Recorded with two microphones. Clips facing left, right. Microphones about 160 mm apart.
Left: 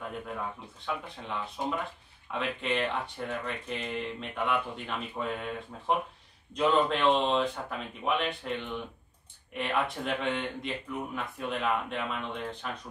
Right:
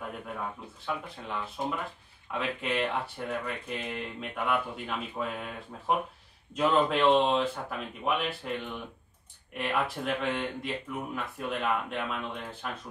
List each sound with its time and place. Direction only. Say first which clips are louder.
0.8 s speech: even; centre (ahead or behind)